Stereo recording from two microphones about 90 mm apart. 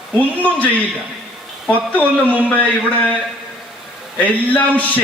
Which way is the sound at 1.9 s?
20° left (ahead or behind).